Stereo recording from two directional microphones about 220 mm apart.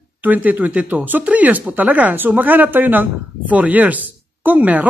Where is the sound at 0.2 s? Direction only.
5° right (ahead or behind).